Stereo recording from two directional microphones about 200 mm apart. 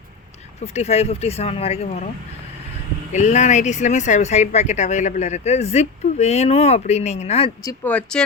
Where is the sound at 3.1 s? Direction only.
35° left (ahead or behind).